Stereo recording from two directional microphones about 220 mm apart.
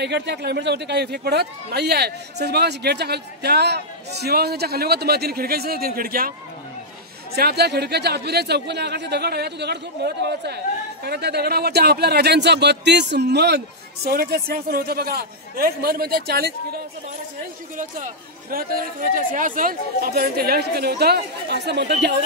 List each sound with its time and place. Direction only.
0.0 s a man's voice: 50° right (ahead or behind)
7.3 s a man's voice: 45° right (ahead or behind)